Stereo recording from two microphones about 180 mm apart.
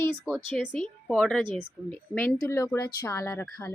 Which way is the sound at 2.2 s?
15° left (ahead or behind).